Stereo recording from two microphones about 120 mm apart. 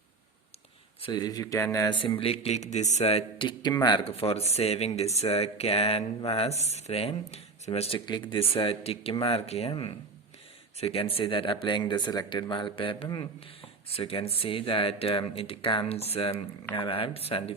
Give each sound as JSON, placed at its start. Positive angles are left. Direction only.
{"t": 1.0, "sound": "speech", "side_deg": 35}
{"t": 2.0, "sound": "speech", "side_deg": 45}
{"t": 4.0, "sound": "speech", "side_deg": 55}
{"t": 8.0, "sound": "speech", "side_deg": 40}